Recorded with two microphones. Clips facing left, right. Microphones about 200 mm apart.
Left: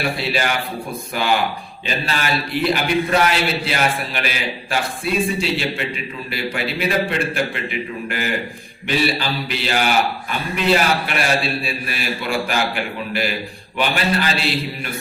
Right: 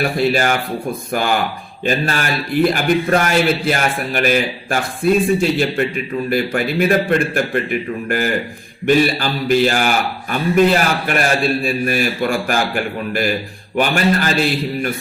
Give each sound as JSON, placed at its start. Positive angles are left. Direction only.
{"t": 0.2, "sound": "a man's voice", "side_deg": -45}